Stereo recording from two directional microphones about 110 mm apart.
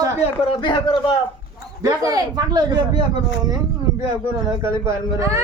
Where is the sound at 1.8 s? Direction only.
35° right (ahead or behind).